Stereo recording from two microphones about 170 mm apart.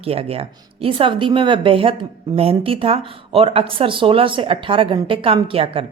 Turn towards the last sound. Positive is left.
turn(degrees=-35)  # may be behind; listen again after turning